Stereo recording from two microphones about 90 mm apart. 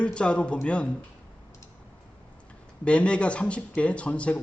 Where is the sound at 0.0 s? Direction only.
10° left (ahead or behind).